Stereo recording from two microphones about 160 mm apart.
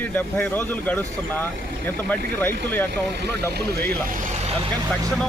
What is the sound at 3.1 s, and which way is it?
Speech, 90° right.